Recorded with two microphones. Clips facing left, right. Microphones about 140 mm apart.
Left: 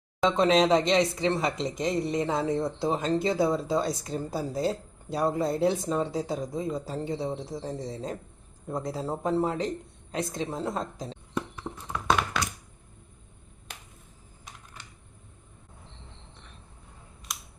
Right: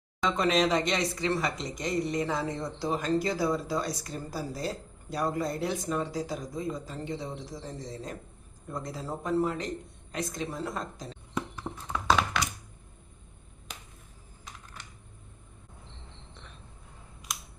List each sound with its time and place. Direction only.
0.2 s speech: 25° left (ahead or behind)
11.6 s tap: 15° right (ahead or behind)